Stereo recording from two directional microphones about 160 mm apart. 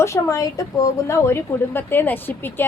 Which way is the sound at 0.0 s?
20° left (ahead or behind).